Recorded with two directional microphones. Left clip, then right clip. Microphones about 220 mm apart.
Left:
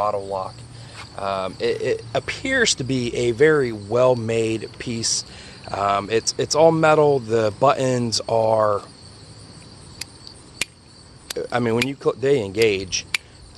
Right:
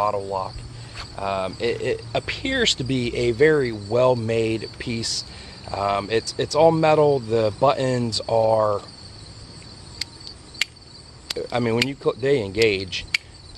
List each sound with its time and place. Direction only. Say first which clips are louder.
0.0 s speech: even; 10° left (ahead or behind)
11.3 s speech: left 1 dB; 20° left (ahead or behind)